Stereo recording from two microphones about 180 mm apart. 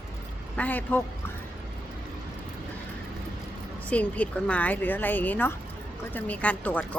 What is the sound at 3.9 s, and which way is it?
Speech, 10° left (ahead or behind).